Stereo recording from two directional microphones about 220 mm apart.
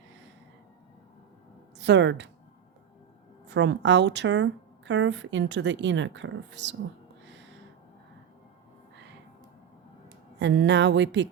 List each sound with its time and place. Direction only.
1.8 s speech: 50° right (ahead or behind)
3.5 s speech: 55° right (ahead or behind)
7.3 s a sound: 55° right (ahead or behind)
10.4 s speech: 55° right (ahead or behind)